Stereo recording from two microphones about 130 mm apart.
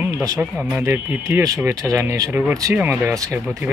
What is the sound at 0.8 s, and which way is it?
Speech, 20° right (ahead or behind).